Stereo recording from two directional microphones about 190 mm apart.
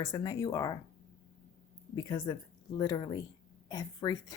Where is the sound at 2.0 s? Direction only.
20° left (ahead or behind).